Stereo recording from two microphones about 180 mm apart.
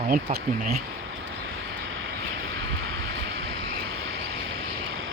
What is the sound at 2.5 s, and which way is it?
Vehicle, 90° right.